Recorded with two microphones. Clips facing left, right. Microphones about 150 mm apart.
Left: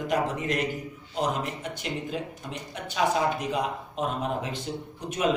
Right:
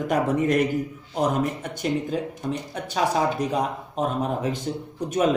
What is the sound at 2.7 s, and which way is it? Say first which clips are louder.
Speech: even; 40° right (ahead or behind).